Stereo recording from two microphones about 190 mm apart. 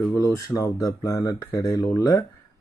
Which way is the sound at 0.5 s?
5° left (ahead or behind).